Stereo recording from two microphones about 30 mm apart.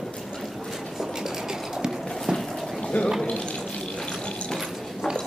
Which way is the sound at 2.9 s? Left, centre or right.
Left.